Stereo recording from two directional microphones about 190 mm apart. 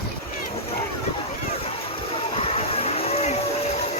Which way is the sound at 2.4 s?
30° left (ahead or behind).